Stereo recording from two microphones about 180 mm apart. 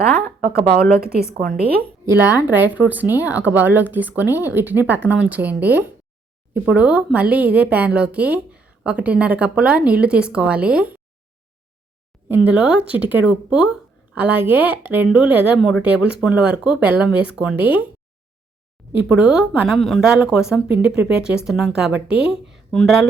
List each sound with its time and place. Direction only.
0.4 s a woman's voice: 55° right (ahead or behind)
2.0 s a woman's voice: 15° right (ahead or behind)
12.5 s a woman's voice: 5° right (ahead or behind)
19.0 s speech: 5° right (ahead or behind)